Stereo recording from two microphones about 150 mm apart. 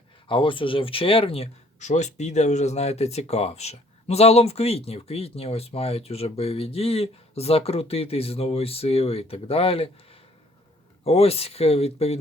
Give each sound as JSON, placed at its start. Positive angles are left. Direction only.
{"t": 0.3, "sound": "speech", "side_deg": 35}
{"t": 11.0, "sound": "speech", "side_deg": 40}